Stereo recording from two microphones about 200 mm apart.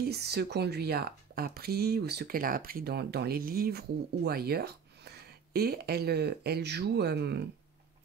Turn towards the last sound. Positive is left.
turn(degrees=-55)  # may be behind; listen again after turning